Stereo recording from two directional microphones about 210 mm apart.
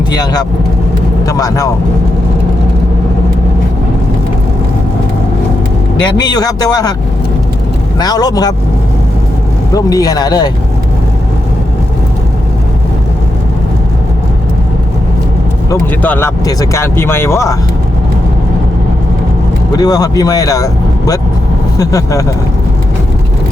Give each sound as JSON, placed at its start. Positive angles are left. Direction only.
{"t": 0.1, "sound": "speech", "side_deg": 20}
{"t": 6.1, "sound": "speech", "side_deg": 20}
{"t": 7.9, "sound": "speech", "side_deg": 20}
{"t": 9.7, "sound": "speech", "side_deg": 15}
{"t": 15.7, "sound": "speech", "side_deg": 10}
{"t": 19.7, "sound": "speech", "side_deg": 15}
{"t": 21.8, "sound": "speech", "side_deg": 15}